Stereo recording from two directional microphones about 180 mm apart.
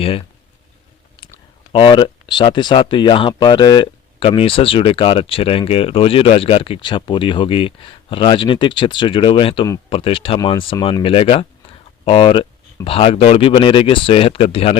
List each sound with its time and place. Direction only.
0.0 s speech: 30° left (ahead or behind)
1.7 s speech: 25° left (ahead or behind)